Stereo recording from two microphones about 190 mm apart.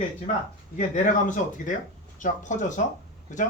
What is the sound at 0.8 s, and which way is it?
Speech, 40° left (ahead or behind).